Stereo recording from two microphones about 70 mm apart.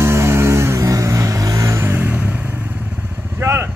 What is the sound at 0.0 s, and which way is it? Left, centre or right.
Vehicle, right.